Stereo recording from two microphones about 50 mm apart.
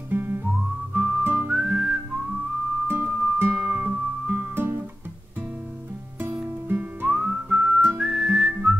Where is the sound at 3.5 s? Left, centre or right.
Right.